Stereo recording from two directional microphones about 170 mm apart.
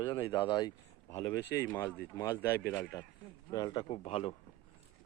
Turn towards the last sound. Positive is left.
turn(degrees=40)  # may be behind; listen again after turning